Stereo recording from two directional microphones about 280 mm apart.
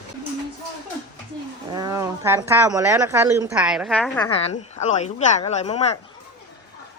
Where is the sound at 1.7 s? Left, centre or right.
Centre.